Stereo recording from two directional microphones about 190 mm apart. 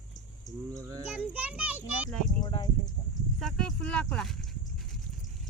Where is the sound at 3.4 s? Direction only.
5° left (ahead or behind).